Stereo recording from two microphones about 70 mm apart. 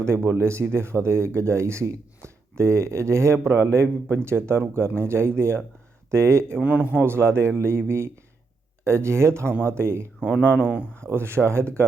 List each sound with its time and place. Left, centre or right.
0.0 s speech: right
6.6 s a man's voice: right
7.0 s speech: right
10.5 s a man's voice: right
11.1 s speech: right